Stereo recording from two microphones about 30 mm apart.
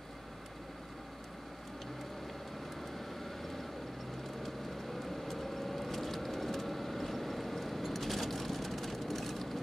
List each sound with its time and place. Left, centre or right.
5.0 s vehicle: centre